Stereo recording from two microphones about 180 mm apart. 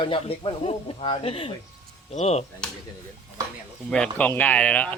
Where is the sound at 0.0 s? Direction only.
30° left (ahead or behind).